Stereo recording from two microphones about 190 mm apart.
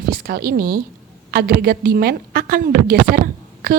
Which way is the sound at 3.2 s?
50° right (ahead or behind).